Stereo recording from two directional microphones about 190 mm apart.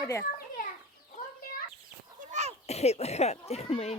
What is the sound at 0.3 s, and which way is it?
Children playing, 45° left (ahead or behind).